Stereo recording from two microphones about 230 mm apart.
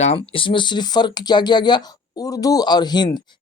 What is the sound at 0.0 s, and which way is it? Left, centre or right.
Speech, left.